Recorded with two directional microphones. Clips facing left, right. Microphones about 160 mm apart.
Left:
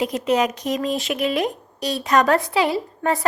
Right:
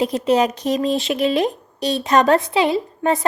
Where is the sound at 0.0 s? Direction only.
30° right (ahead or behind).